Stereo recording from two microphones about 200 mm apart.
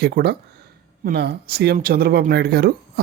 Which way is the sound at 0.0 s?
50° right (ahead or behind).